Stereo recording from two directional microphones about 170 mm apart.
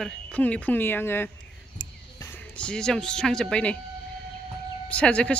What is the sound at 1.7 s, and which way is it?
Music, 15° left (ahead or behind).